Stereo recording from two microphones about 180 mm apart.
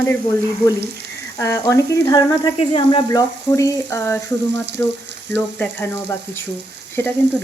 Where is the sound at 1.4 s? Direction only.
15° left (ahead or behind).